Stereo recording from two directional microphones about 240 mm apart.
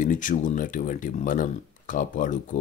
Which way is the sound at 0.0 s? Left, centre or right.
Left.